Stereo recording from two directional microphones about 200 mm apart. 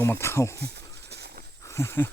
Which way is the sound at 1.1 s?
55° right (ahead or behind).